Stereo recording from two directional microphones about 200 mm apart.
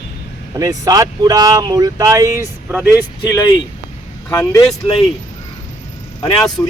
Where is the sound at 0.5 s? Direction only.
15° right (ahead or behind).